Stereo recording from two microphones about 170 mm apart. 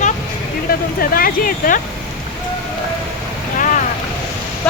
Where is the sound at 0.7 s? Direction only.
60° left (ahead or behind).